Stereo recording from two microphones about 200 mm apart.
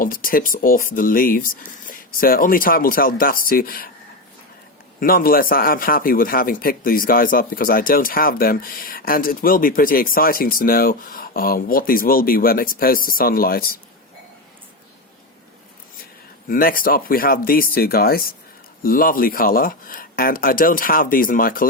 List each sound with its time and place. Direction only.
0.0 s a man's voice: 45° left (ahead or behind)
4.9 s a man's voice: 45° left (ahead or behind)
16.5 s a man's voice: 45° left (ahead or behind)